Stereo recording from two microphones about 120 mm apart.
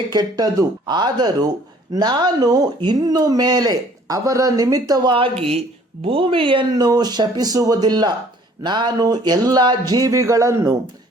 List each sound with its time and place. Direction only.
0.1 s speech: 35° right (ahead or behind)
5.1 s a woman's voice: 50° right (ahead or behind); by 10.8 s 25° right (ahead or behind)